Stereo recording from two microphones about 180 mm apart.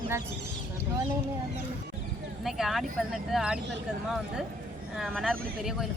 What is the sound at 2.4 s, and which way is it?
Speech, centre (ahead or behind).